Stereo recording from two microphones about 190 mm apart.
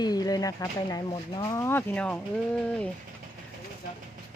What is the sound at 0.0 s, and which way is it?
Speech, 20° left (ahead or behind).